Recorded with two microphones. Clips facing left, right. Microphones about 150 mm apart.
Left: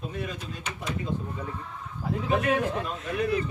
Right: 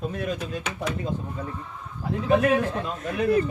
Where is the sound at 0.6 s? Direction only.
90° right.